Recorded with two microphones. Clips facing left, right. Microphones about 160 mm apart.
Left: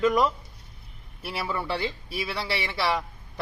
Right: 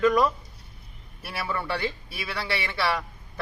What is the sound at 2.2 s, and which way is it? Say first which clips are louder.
A man's voice: even; 20° left (ahead or behind).